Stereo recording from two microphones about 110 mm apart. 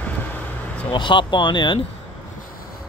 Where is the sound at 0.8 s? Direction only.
45° left (ahead or behind).